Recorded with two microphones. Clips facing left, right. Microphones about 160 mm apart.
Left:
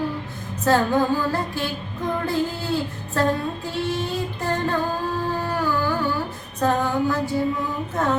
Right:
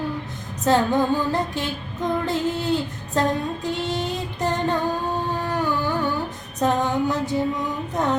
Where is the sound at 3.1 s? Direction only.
20° right (ahead or behind).